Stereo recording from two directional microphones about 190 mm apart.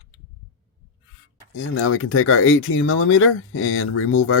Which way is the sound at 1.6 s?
90° left.